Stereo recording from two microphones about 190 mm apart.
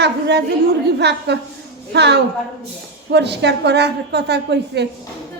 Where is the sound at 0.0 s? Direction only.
60° right (ahead or behind).